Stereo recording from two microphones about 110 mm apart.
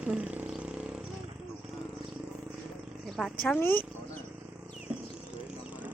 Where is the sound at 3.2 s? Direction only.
Centre (ahead or behind).